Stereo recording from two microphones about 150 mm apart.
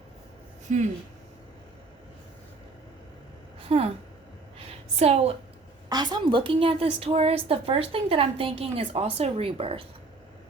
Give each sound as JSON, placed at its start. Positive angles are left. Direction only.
{"t": 0.7, "sound": "a woman's voice", "side_deg": -55}
{"t": 3.7, "sound": "a woman's voice", "side_deg": -40}
{"t": 4.9, "sound": "a woman's voice", "side_deg": -45}
{"t": 5.9, "sound": "a woman's voice", "side_deg": -30}